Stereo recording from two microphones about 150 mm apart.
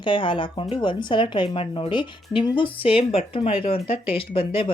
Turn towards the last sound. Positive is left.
turn(degrees=35)  # may be behind; listen again after turning